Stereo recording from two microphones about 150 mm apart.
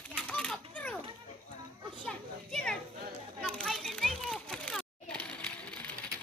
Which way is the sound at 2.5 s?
5° left (ahead or behind).